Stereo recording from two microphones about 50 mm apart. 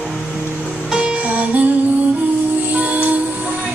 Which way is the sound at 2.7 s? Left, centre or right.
Right.